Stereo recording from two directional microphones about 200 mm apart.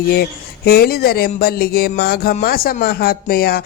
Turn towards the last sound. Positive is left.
turn(degrees=50)  # may be behind; listen again after turning